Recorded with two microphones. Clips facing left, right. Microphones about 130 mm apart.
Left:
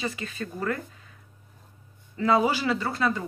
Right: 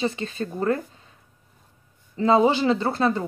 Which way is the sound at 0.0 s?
30° right (ahead or behind).